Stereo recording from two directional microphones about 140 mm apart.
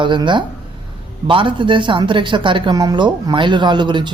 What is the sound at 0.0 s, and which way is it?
Speech, 35° right (ahead or behind).